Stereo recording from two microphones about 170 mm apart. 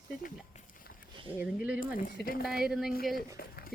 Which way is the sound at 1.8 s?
55° left (ahead or behind).